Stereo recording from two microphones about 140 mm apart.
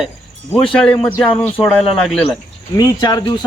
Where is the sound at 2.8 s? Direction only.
30° left (ahead or behind).